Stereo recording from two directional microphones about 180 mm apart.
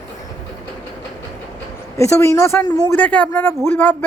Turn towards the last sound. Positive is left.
turn(degrees=10)  # may be behind; listen again after turning